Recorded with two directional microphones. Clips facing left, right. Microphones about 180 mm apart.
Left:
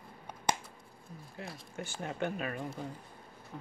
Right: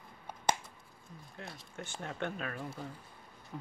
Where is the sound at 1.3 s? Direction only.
5° left (ahead or behind).